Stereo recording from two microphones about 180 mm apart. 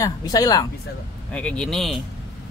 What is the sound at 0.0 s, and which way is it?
Speech, 20° left (ahead or behind).